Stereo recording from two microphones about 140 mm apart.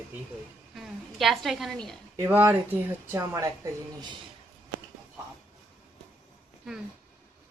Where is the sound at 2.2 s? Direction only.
15° right (ahead or behind).